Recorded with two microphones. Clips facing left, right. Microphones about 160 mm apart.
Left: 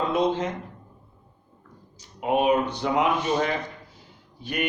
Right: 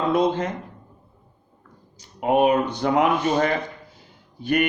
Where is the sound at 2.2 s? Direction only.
55° right (ahead or behind).